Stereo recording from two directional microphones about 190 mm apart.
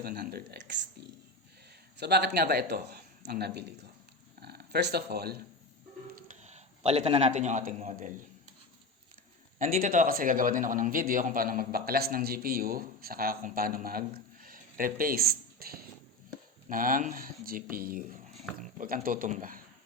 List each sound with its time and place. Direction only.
0.0 s speech: 55° right (ahead or behind)
2.0 s speech: 60° right (ahead or behind)
6.1 s a man's voice: 40° right (ahead or behind)
9.6 s a man's voice: 45° right (ahead or behind)